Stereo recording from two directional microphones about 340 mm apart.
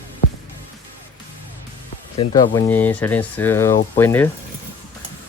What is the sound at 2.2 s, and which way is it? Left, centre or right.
Speech, centre.